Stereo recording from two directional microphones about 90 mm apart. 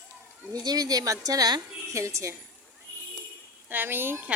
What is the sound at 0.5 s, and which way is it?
A woman's voice, 45° right (ahead or behind).